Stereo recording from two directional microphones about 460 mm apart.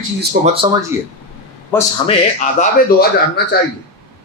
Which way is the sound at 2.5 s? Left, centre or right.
Centre.